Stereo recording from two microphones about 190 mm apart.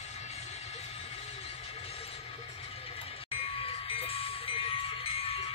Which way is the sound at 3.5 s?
30° left (ahead or behind).